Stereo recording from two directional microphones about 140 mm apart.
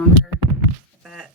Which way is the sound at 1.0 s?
Centre (ahead or behind).